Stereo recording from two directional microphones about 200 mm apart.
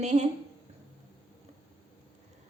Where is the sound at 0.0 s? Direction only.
35° right (ahead or behind).